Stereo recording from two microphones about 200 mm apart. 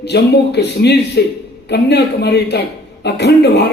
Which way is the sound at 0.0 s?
55° left (ahead or behind).